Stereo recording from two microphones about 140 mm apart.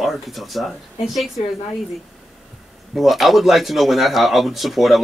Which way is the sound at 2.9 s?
Centre (ahead or behind).